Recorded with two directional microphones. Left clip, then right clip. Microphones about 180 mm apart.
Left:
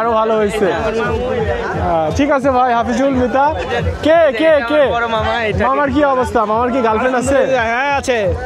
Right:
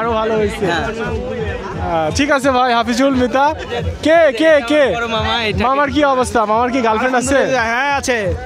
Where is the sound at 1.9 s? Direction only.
5° right (ahead or behind); by 4.9 s 30° right (ahead or behind).